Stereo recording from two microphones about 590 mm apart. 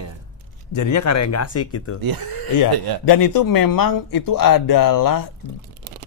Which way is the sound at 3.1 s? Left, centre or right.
Left.